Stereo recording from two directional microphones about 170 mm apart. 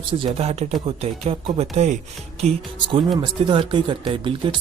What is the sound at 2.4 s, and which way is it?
Speech, 30° right (ahead or behind).